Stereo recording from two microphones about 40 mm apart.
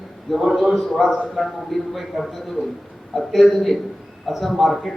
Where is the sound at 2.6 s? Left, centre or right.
Right.